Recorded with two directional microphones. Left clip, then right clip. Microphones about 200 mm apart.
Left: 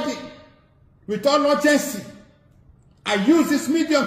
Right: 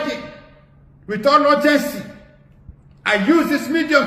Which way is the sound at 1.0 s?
25° left (ahead or behind).